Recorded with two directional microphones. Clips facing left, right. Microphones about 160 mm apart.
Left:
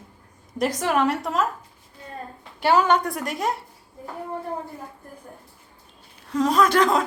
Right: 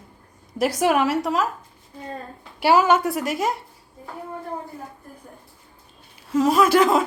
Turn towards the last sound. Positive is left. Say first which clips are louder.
# right 2 dB
turn(degrees=-5)  # may be behind; listen again after turning